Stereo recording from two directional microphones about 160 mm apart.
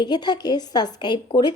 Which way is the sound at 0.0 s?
25° left (ahead or behind).